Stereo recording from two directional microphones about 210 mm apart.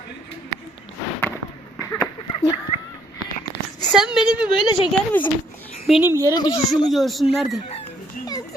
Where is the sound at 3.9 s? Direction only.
Centre (ahead or behind).